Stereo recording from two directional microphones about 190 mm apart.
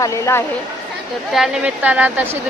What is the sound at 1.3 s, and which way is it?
A woman's voice, 5° right (ahead or behind).